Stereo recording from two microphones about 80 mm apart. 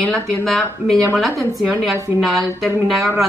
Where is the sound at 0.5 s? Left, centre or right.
Centre.